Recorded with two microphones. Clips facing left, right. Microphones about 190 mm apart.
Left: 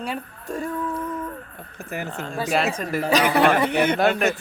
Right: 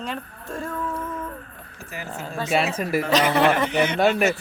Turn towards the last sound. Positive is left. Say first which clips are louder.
# right 1 dB
turn(degrees=0)  # may be behind; listen again after turning